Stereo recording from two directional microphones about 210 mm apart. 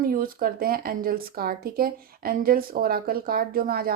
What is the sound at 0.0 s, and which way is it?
Speech, 45° right (ahead or behind).